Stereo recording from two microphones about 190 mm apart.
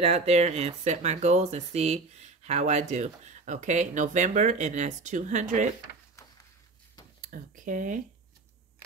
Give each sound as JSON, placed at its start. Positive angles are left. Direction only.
{"t": 0.0, "sound": "speech", "side_deg": -35}
{"t": 7.2, "sound": "speech", "side_deg": -45}